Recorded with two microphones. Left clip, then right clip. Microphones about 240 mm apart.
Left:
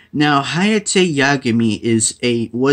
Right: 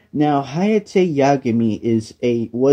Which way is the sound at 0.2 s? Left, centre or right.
Left.